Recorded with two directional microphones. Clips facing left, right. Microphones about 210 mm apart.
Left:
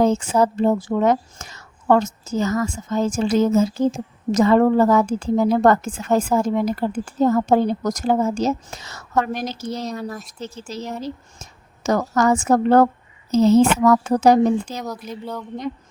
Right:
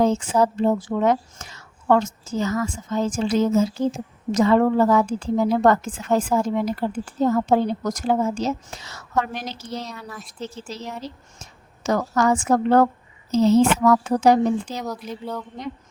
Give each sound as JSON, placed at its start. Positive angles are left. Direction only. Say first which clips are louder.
{"t": 0.0, "sound": "speech", "louder": "left 2 dB", "side_deg": 45}
{"t": 14.8, "sound": "speech", "louder": "even", "side_deg": 0}